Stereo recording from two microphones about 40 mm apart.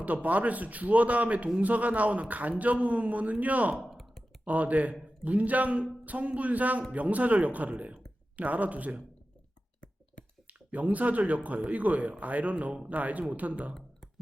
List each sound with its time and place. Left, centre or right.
0.0 s a man's voice: right
3.8 s a sound: centre
4.4 s a man's voice: right
10.4 s a man's voice: right